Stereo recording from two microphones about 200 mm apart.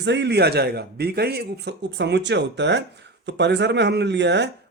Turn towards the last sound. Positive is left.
turn(degrees=-60)  # may be behind; listen again after turning